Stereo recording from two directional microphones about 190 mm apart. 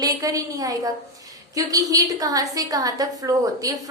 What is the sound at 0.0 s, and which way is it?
A woman's voice, 20° right (ahead or behind).